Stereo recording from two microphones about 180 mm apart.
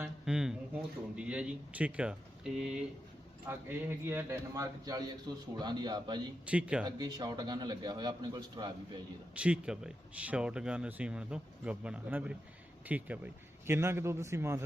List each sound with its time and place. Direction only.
0.0 s a man's voice: 5° right (ahead or behind); by 6.2 s 25° right (ahead or behind)
6.4 s a man's voice: 5° right (ahead or behind)
6.8 s a man's voice: 20° right (ahead or behind)
9.3 s speech: 5° right (ahead or behind)